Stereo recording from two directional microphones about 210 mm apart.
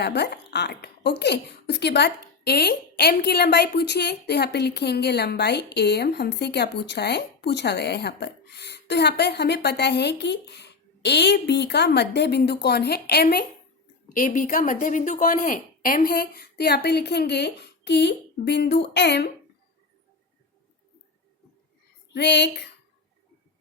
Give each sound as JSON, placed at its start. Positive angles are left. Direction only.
{"t": 0.0, "sound": "a woman's voice", "side_deg": 50}
{"t": 14.1, "sound": "a woman's voice", "side_deg": 40}
{"t": 22.1, "sound": "a woman's voice", "side_deg": 55}